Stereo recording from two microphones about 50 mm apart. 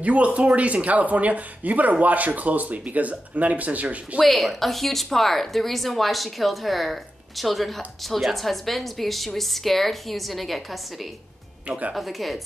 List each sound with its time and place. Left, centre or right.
0.0 s speech: right
4.2 s a woman's voice: centre
11.6 s speech: right
11.9 s a woman's voice: centre